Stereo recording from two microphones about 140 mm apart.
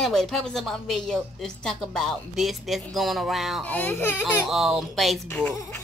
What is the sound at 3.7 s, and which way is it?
Speech, 10° left (ahead or behind).